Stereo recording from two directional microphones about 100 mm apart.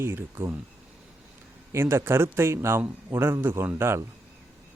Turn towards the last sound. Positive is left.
turn(degrees=-25)  # may be behind; listen again after turning